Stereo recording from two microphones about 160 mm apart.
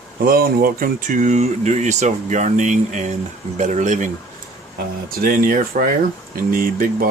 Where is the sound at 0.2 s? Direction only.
65° right (ahead or behind); by 4.1 s 50° right (ahead or behind).